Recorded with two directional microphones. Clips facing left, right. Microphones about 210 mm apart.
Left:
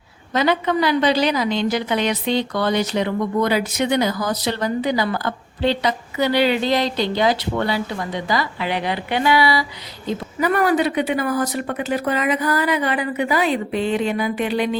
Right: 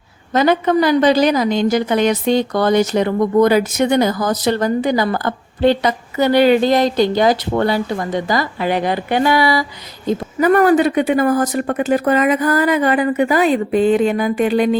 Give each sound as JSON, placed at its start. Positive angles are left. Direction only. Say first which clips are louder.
{"t": 0.3, "sound": "a woman's voice", "louder": "right 5 dB", "side_deg": -45}